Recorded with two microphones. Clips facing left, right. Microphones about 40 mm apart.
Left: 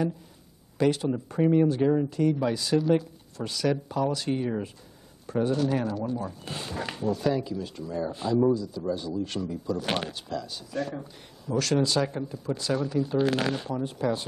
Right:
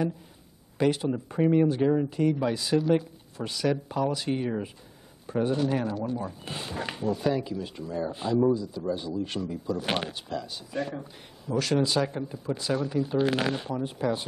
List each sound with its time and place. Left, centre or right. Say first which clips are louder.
0.7 s speech: left 1 dB; centre
1.8 s speech: even; centre
2.0 s speech: even; centre